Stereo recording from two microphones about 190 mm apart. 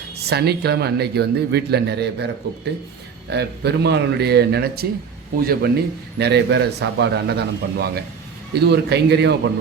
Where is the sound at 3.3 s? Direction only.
60° right (ahead or behind).